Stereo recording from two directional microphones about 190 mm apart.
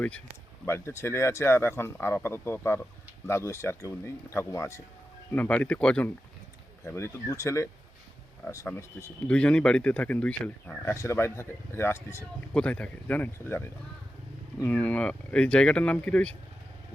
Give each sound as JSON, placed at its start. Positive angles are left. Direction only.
{"t": 0.6, "sound": "speech", "side_deg": 15}